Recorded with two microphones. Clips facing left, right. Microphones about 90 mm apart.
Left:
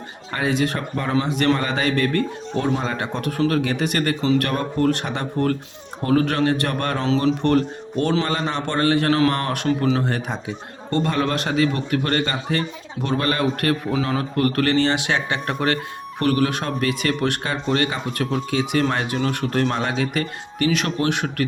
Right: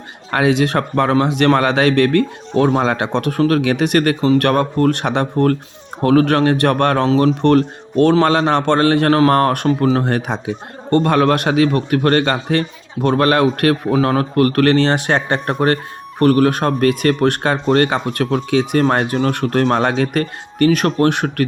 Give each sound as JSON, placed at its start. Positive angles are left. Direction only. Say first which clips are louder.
{"t": 0.3, "sound": "speech", "louder": "right 7 dB", "side_deg": -70}
{"t": 4.2, "sound": "speech", "louder": "right 5 dB", "side_deg": -45}
{"t": 4.4, "sound": "speech", "louder": "right 6 dB", "side_deg": -60}
{"t": 10.0, "sound": "speech", "louder": "right 5 dB", "side_deg": -60}
{"t": 18.7, "sound": "speech", "louder": "right 5 dB", "side_deg": -45}